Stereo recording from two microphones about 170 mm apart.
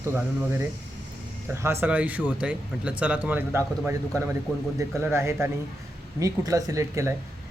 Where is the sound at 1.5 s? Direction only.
15° right (ahead or behind).